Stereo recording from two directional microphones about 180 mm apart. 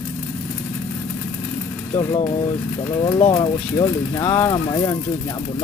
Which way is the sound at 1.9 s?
20° left (ahead or behind).